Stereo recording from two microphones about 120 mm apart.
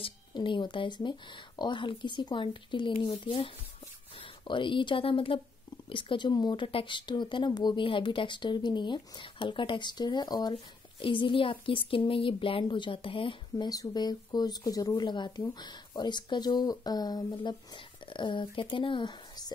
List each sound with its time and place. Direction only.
0.0 s speech: 40° left (ahead or behind)
13.7 s speech: 35° left (ahead or behind)